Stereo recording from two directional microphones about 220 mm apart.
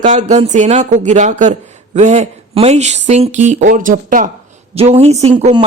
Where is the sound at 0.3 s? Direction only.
30° right (ahead or behind).